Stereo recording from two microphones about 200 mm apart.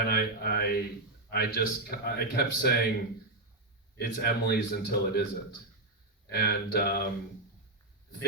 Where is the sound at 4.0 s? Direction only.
50° left (ahead or behind).